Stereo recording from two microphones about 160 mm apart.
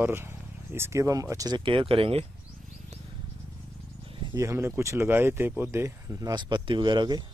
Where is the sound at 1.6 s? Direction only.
35° right (ahead or behind).